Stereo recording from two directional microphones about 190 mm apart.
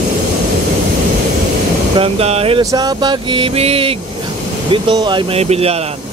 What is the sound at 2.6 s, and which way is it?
Vehicle, 20° right (ahead or behind).